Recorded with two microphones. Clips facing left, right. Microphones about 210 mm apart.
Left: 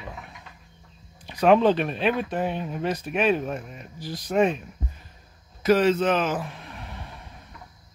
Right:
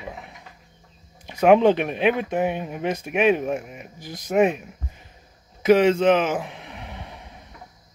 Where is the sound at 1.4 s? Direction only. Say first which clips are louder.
Right 3 dB; 10° right (ahead or behind).